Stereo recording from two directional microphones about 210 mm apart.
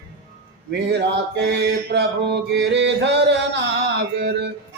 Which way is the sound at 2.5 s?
55° right (ahead or behind).